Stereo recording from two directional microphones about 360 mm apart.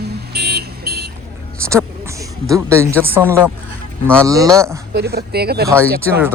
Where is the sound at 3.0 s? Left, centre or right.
Centre.